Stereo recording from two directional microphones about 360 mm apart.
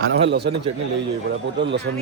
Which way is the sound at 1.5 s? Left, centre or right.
Right.